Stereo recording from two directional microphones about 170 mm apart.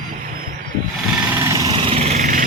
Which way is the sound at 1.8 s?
35° right (ahead or behind).